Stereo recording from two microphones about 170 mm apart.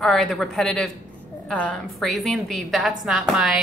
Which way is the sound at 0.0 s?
Centre (ahead or behind).